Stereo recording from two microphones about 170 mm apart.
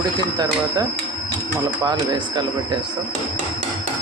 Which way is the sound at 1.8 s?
25° right (ahead or behind).